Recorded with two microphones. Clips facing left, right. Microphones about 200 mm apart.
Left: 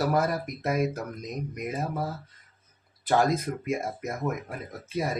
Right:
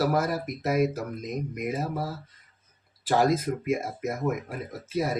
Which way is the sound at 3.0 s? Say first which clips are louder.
Right 1 dB; 5° right (ahead or behind).